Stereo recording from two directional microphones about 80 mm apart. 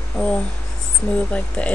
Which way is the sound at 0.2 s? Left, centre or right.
Centre.